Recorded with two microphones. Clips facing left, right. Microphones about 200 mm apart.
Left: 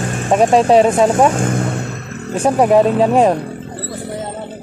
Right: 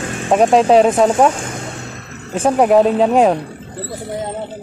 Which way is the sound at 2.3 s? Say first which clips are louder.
Even; centre (ahead or behind).